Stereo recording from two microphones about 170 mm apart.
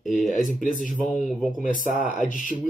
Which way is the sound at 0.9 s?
Centre (ahead or behind).